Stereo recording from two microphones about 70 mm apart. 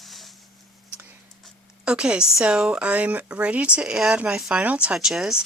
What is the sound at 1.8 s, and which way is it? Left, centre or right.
Speech, centre.